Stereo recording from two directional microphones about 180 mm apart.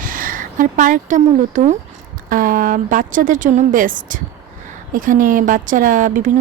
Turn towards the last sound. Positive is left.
turn(degrees=-45)  # may be behind; listen again after turning